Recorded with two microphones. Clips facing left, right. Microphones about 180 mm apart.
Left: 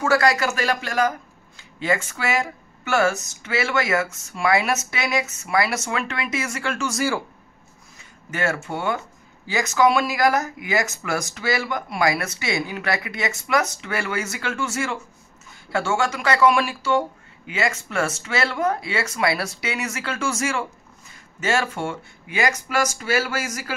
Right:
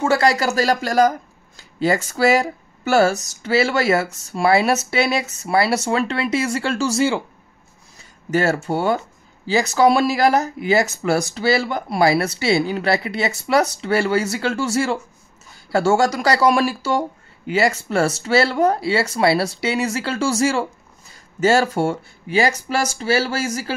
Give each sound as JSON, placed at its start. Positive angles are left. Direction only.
{"t": 0.0, "sound": "speech", "side_deg": -25}
{"t": 8.3, "sound": "speech", "side_deg": -35}